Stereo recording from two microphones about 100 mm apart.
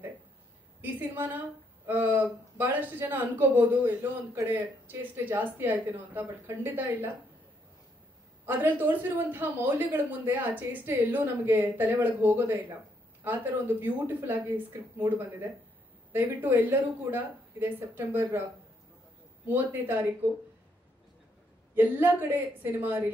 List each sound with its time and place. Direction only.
0.8 s speech: 20° right (ahead or behind)
8.5 s speech: 20° right (ahead or behind)
21.7 s speech: 20° right (ahead or behind)